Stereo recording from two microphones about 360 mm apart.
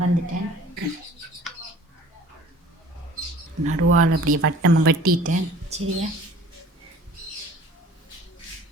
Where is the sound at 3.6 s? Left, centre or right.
Right.